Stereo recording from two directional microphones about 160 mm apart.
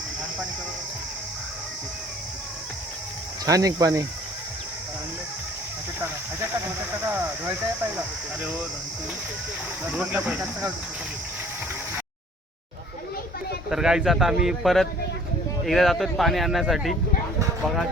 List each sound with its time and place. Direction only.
3.4 s speech: 20° right (ahead or behind)
7.0 s a sound: 15° right (ahead or behind)
8.4 s speech: 10° right (ahead or behind)
9.8 s speech: 10° right (ahead or behind)
13.7 s speech: 5° right (ahead or behind)